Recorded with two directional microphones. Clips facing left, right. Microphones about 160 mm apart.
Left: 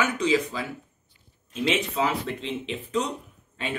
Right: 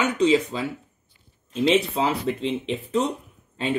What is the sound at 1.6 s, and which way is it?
Speech, 30° right (ahead or behind).